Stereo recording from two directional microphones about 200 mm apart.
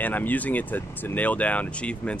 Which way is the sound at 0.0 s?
10° left (ahead or behind).